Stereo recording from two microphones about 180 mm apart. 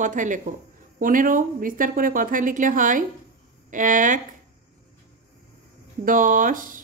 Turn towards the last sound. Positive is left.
turn(degrees=-50)  # may be behind; listen again after turning